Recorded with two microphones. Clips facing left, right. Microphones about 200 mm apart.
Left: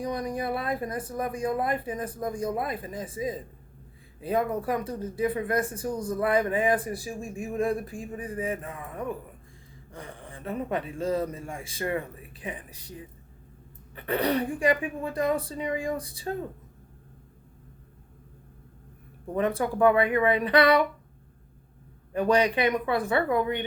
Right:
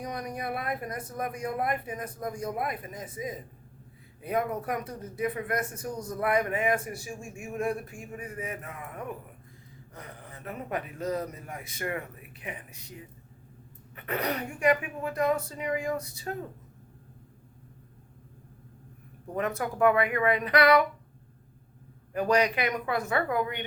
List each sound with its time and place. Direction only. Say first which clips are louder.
0.0 s speech: left 5 dB; 30° left (ahead or behind)
19.4 s speech: left 3 dB; 30° left (ahead or behind)
22.1 s speech: left 2 dB; 30° left (ahead or behind)